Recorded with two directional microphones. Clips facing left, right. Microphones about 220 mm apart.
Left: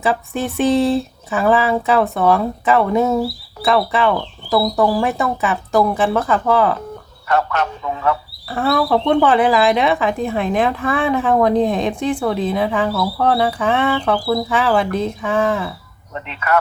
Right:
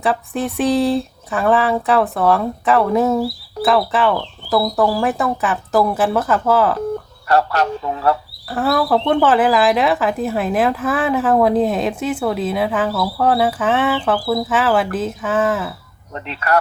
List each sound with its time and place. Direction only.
0.0 s speech: centre (ahead or behind)
7.3 s speech: 35° right (ahead or behind)
8.4 s speech: 5° right (ahead or behind)
16.2 s speech: 35° right (ahead or behind)